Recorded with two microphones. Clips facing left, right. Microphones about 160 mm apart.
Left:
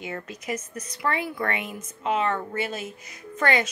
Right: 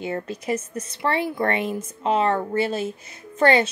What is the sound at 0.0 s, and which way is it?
A woman's voice, 30° right (ahead or behind).